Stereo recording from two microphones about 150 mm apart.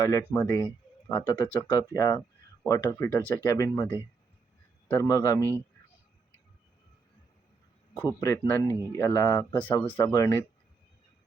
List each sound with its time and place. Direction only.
0.0 s speech: 20° left (ahead or behind)
8.0 s speech: 20° left (ahead or behind)